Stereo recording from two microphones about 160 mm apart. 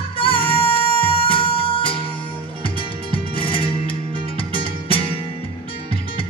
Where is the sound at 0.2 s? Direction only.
35° left (ahead or behind).